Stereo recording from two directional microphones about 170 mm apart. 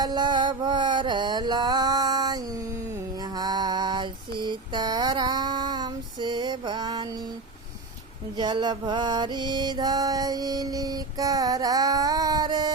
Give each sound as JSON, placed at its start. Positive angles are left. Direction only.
{"t": 0.0, "sound": "music", "side_deg": -25}
{"t": 3.2, "sound": "mantra", "side_deg": -25}
{"t": 8.4, "sound": "mantra", "side_deg": -25}